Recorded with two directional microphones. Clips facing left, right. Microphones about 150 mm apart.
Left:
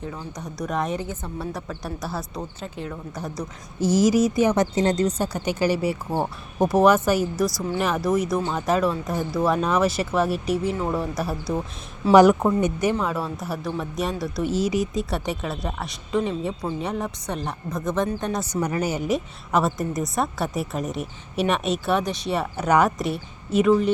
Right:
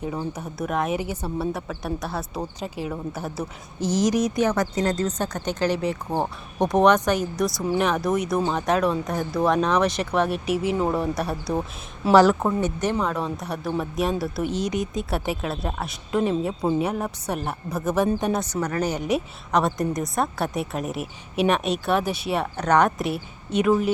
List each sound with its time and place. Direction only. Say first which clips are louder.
0.0 s a woman's voice: right 5 dB; 15° right (ahead or behind)
0.4 s a woman's voice: left 1 dB; 5° right (ahead or behind)
2.6 s a woman's voice: right 3 dB; 10° right (ahead or behind)
3.8 s speech: left 3 dB; 10° left (ahead or behind)
4.5 s speech: left 3 dB; 20° left (ahead or behind)
5.0 s a woman's voice: left 2 dB; 10° left (ahead or behind)
12.1 s a woman's voice: left 2 dB; 15° left (ahead or behind); by 18.3 s 10° right (ahead or behind)
18.6 s a woman's voice: left 1 dB; 10° left (ahead or behind)